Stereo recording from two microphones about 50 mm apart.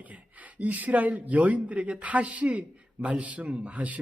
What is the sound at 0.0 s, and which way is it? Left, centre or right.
Speech, right.